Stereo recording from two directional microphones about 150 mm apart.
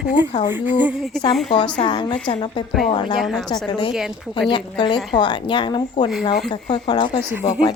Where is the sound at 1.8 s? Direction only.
35° left (ahead or behind).